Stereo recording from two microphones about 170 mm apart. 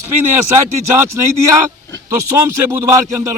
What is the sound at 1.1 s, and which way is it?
Speech, 15° right (ahead or behind).